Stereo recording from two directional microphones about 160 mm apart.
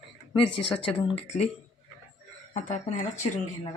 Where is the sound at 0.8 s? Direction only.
35° left (ahead or behind).